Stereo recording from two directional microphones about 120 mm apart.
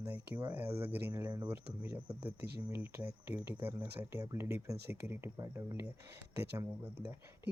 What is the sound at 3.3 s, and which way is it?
Speech, 15° right (ahead or behind).